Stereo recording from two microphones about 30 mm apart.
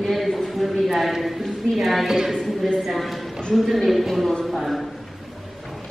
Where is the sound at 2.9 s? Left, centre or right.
Centre.